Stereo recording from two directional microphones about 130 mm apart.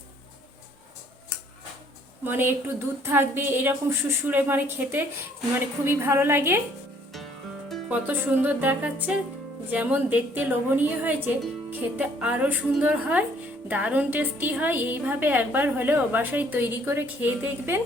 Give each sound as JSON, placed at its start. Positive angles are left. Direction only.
{"t": 2.2, "sound": "a woman's voice", "side_deg": -15}
{"t": 7.9, "sound": "a woman's voice", "side_deg": -15}